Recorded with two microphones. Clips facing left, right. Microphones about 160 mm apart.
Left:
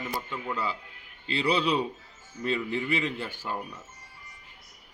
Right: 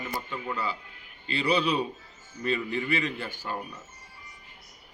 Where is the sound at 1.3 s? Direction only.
25° left (ahead or behind).